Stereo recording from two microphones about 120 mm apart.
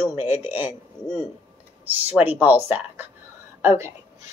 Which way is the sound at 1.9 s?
15° right (ahead or behind).